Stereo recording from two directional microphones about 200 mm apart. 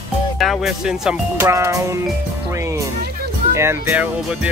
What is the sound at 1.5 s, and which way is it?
Speech, 15° right (ahead or behind).